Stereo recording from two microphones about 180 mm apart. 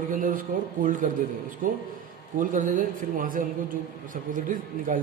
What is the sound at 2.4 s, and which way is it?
Speech, 50° right (ahead or behind).